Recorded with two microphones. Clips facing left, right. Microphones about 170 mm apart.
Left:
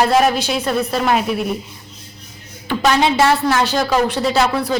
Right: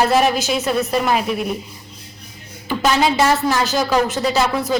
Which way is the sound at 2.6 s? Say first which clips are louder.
Left 1 dB; centre (ahead or behind).